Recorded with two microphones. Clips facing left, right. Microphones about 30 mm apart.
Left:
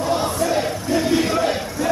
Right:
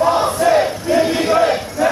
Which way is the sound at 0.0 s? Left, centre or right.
Right.